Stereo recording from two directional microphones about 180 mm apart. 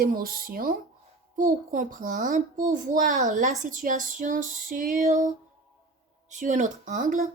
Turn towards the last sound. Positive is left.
turn(degrees=-45)  # may be behind; listen again after turning